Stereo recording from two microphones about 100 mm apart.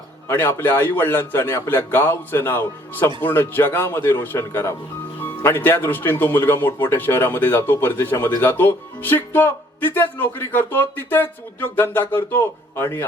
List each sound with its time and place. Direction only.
0.3 s speech: 25° left (ahead or behind)